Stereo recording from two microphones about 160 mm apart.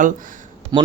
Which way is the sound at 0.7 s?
25° right (ahead or behind).